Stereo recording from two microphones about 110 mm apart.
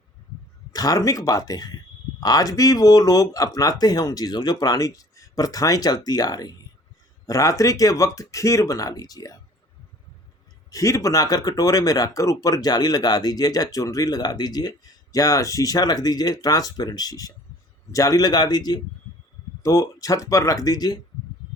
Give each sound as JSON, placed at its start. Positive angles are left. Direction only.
{"t": 0.7, "sound": "speech", "side_deg": 35}
{"t": 10.7, "sound": "speech", "side_deg": 30}